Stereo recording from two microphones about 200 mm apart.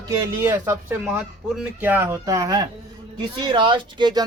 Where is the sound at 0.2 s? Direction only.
15° right (ahead or behind).